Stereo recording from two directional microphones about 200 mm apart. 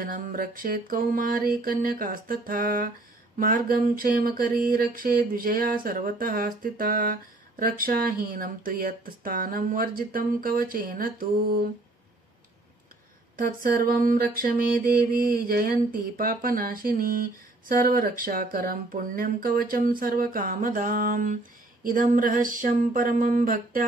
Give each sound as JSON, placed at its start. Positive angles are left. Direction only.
{"t": 0.0, "sound": "mantra", "side_deg": -40}
{"t": 13.4, "sound": "mantra", "side_deg": -45}